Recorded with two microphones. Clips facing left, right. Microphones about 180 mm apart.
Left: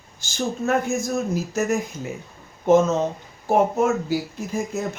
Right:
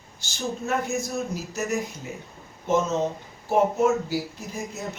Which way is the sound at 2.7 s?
50° left (ahead or behind).